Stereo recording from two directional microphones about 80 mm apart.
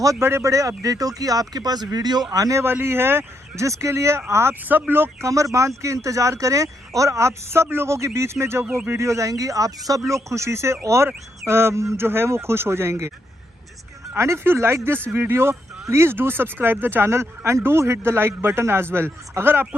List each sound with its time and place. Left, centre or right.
0.2 s speech: right
2.3 s speech: right
2.6 s speech: right
5.2 s speech: right
14.2 s speech: right